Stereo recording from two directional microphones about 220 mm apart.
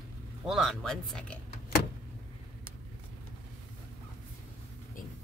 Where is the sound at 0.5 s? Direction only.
Centre (ahead or behind).